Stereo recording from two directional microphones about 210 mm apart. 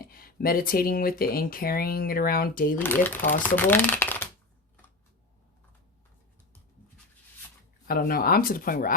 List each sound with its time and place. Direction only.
0.0 s speech: 45° left (ahead or behind)
2.7 s speech: 10° left (ahead or behind)
7.9 s speech: 45° left (ahead or behind)